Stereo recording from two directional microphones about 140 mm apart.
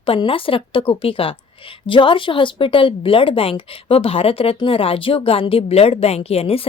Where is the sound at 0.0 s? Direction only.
40° left (ahead or behind).